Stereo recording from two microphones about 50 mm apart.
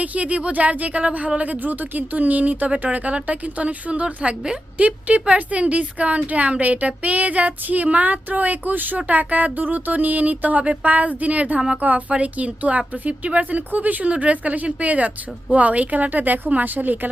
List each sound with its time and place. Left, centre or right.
0.0 s speech: right